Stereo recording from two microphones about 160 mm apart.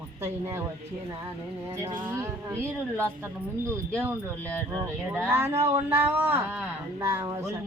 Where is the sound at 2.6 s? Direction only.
10° left (ahead or behind).